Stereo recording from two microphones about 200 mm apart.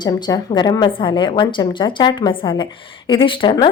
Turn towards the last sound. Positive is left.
turn(degrees=25)  # may be behind; listen again after turning